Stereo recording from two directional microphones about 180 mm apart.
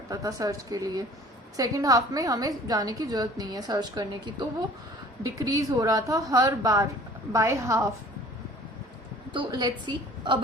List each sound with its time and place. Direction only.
0.1 s a woman's voice: 20° right (ahead or behind)
9.3 s a woman's voice: 25° right (ahead or behind)